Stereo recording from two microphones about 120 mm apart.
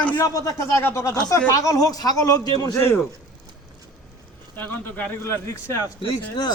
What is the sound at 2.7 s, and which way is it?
Speech, 20° left (ahead or behind).